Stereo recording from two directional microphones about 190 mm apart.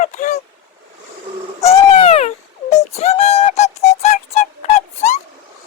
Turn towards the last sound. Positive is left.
turn(degrees=35)  # may be behind; listen again after turning